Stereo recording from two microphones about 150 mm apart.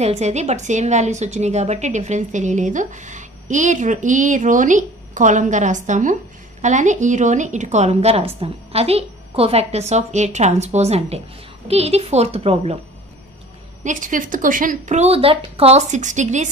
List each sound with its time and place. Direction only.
0.0 s a woman's voice: 45° right (ahead or behind)
13.8 s a woman's voice: 60° right (ahead or behind)